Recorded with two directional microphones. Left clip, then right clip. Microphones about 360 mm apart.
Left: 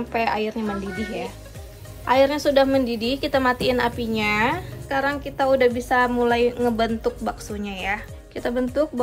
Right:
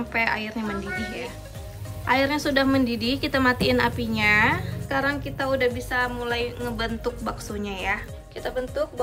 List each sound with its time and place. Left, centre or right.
0.1 s a woman's voice: centre
8.4 s speech: centre